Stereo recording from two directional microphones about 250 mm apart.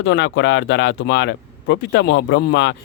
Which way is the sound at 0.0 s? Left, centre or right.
Left.